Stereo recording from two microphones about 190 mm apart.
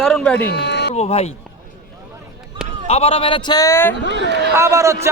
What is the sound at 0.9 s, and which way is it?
Speech, 35° left (ahead or behind).